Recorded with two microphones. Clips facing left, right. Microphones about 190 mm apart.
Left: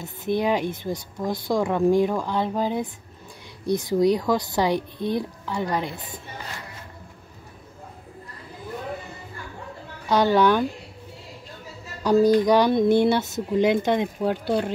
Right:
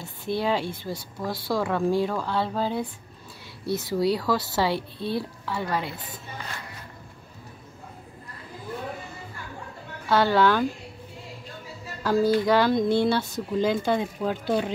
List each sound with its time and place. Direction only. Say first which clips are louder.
0.0 s speech: left 3 dB; 15° left (ahead or behind)
5.9 s speech: left 2 dB; 45° left (ahead or behind)
10.0 s speech: left 2 dB; 15° left (ahead or behind)
12.0 s speech: left 4 dB; 15° left (ahead or behind)